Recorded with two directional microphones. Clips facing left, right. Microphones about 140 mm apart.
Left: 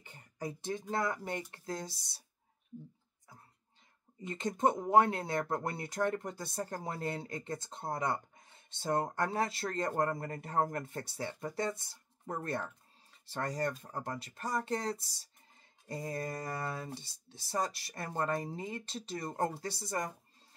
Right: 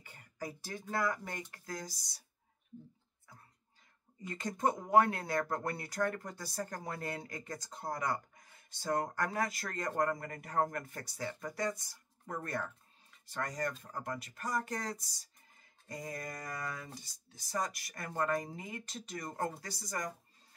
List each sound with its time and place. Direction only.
0.0 s speech: 25° left (ahead or behind)
4.2 s speech: 25° left (ahead or behind)